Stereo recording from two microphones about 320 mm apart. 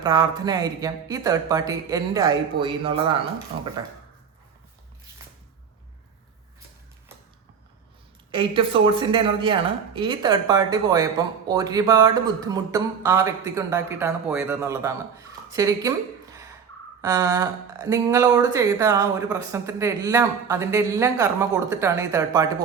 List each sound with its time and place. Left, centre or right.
0.0 s speech: centre
8.3 s speech: centre
17.0 s speech: centre